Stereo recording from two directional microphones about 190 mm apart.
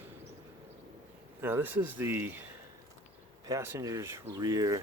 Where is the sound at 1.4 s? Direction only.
10° right (ahead or behind).